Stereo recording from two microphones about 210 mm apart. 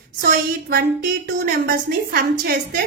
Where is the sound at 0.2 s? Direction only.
45° right (ahead or behind).